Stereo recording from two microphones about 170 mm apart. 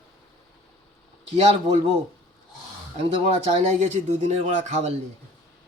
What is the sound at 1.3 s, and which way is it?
Speech, 35° right (ahead or behind).